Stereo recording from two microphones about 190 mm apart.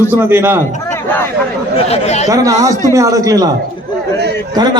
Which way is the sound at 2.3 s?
20° right (ahead or behind).